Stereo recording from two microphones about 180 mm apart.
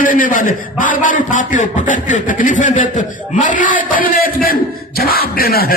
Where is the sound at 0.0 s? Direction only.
50° left (ahead or behind).